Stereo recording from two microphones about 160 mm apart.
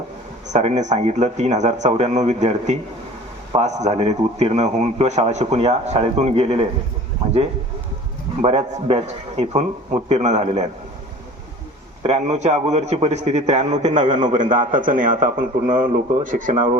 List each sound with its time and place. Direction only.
0.5 s a man's voice: 45° right (ahead or behind)
8.4 s a man's voice: 40° right (ahead or behind)
12.0 s a man's voice: 45° right (ahead or behind)